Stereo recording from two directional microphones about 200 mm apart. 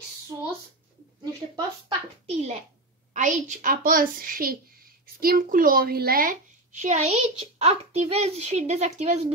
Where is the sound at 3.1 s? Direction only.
40° right (ahead or behind).